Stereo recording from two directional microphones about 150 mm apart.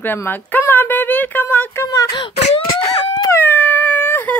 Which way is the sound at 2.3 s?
50° left (ahead or behind).